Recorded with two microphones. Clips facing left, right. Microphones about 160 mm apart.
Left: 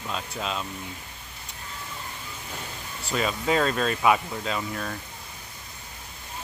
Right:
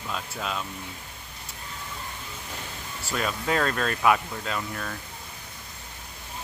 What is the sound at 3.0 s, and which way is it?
Speech, centre (ahead or behind).